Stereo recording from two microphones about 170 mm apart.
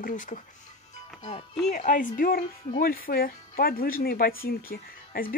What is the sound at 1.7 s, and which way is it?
Speech, 50° left (ahead or behind).